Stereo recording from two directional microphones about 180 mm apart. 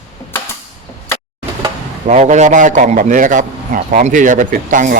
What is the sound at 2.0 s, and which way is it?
A man's voice, 40° right (ahead or behind).